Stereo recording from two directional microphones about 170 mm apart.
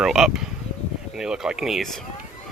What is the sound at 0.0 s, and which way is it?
Speech, centre (ahead or behind).